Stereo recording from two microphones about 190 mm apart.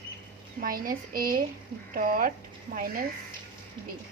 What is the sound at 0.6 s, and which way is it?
Speech, 50° right (ahead or behind).